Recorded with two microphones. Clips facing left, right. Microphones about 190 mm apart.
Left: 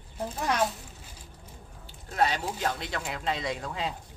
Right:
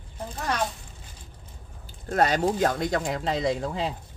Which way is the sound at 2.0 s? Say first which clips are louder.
Right 5 dB; 45° right (ahead or behind).